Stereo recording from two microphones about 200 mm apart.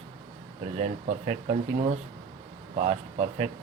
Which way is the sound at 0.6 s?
35° right (ahead or behind).